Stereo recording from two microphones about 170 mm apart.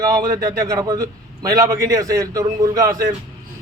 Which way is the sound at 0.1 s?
25° right (ahead or behind).